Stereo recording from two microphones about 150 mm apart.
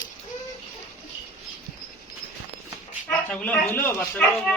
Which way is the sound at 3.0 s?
10° left (ahead or behind).